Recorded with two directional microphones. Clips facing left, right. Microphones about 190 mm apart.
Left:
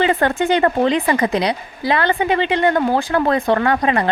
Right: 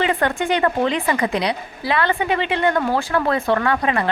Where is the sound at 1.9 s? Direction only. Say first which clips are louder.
Left 3 dB; 30° left (ahead or behind).